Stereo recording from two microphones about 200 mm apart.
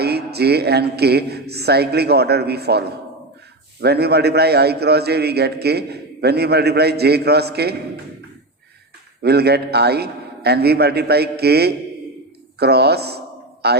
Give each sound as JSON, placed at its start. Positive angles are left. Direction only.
{"t": 0.0, "sound": "a man's voice", "side_deg": -55}
{"t": 9.2, "sound": "a man's voice", "side_deg": -55}
{"t": 12.5, "sound": "a sound", "side_deg": -55}